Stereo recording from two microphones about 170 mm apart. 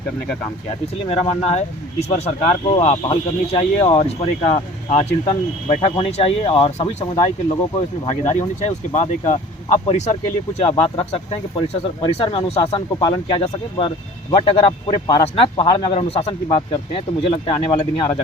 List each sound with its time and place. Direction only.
1.0 s speech: 35° left (ahead or behind)